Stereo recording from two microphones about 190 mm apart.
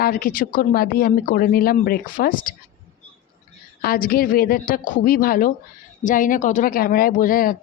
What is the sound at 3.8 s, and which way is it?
Speech, 50° left (ahead or behind).